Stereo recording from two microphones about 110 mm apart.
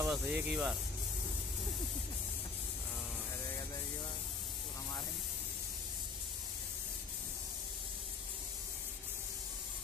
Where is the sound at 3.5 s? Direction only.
25° left (ahead or behind).